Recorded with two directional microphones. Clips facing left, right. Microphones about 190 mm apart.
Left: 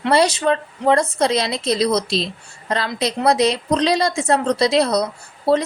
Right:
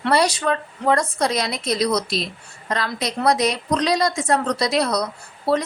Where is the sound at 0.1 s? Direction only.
25° left (ahead or behind).